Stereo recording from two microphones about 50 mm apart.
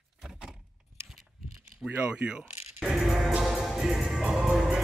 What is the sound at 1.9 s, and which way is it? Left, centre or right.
Speech, right.